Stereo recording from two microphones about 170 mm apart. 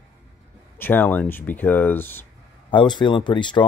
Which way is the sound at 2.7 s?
30° left (ahead or behind).